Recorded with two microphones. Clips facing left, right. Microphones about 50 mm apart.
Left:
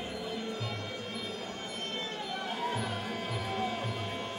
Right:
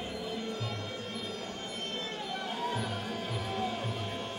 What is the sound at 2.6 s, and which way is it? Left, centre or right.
Music, left.